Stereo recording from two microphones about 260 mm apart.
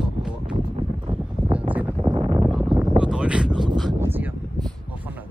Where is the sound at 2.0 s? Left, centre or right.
Centre.